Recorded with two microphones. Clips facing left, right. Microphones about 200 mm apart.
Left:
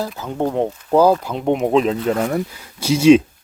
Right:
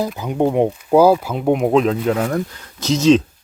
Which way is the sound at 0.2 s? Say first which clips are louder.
Right 4 dB; 15° right (ahead or behind).